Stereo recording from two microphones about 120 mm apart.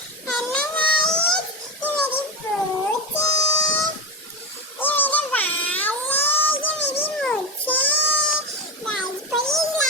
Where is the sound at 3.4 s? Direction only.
30° left (ahead or behind).